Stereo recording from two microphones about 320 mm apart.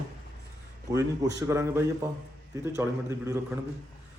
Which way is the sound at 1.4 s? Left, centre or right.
Centre.